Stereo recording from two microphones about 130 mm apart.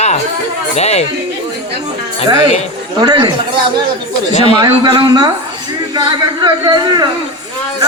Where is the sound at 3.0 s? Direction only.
35° right (ahead or behind).